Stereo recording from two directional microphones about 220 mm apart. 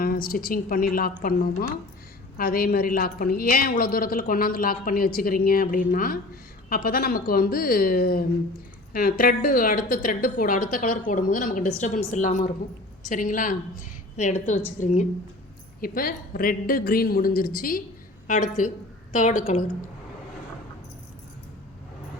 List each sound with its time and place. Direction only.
0.0 s a woman's voice: 40° left (ahead or behind)